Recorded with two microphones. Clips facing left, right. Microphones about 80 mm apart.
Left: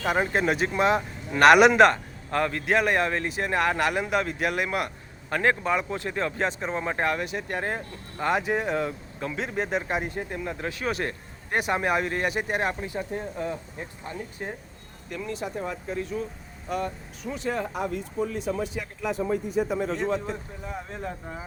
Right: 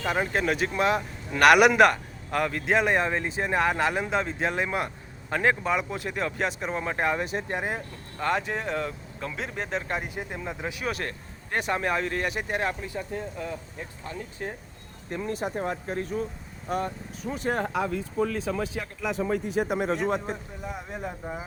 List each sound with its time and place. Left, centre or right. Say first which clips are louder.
0.0 s a man's voice: left 2 dB; centre; by 4.9 s right
5.3 s a man's voice: left 1 dB; centre
7.3 s speech: right 1 dB; right
8.2 s speech: left 2 dB; centre
10.1 s a man's voice: left 2 dB; centre
10.8 s speech: left 4 dB; centre
12.3 s speech: left 3 dB; centre
12.5 s speech: left 1 dB; centre
15.3 s speech: right 2 dB; right
17.7 s speech: right 2 dB; right
20.1 s speech: even; right
20.3 s a man's voice: even; centre